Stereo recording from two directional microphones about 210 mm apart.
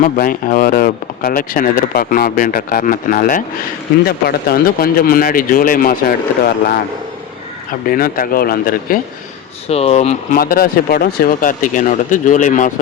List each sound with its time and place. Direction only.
0.0 s speech: 40° left (ahead or behind)
7.9 s speech: 45° left (ahead or behind)
9.6 s speech: 30° left (ahead or behind)
10.3 s speech: 45° left (ahead or behind)